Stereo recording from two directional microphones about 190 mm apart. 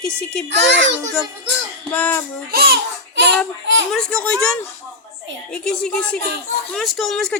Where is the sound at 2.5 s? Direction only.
55° right (ahead or behind).